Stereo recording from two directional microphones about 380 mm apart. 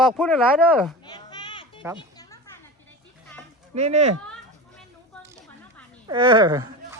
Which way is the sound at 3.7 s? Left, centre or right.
Centre.